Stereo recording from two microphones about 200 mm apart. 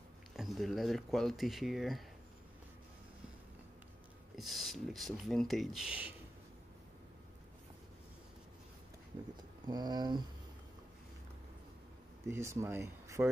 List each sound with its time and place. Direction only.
0.4 s speech: centre (ahead or behind)
4.4 s speech: centre (ahead or behind)
9.7 s speech: 20° right (ahead or behind)
12.3 s speech: 15° right (ahead or behind)